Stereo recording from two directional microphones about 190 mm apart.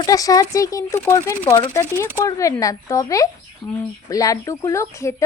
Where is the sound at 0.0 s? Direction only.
20° left (ahead or behind).